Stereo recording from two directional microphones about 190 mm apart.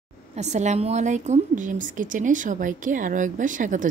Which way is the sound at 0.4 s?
40° right (ahead or behind).